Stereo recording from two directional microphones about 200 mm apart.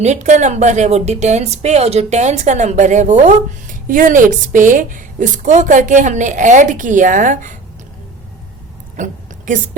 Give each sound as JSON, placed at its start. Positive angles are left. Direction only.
{"t": 0.0, "sound": "speech", "side_deg": -35}